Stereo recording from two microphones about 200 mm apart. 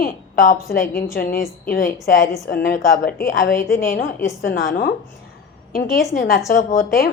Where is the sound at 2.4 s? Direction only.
50° left (ahead or behind).